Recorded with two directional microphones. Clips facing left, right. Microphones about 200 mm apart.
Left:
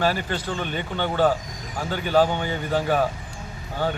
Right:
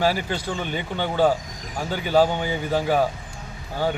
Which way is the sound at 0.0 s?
10° right (ahead or behind).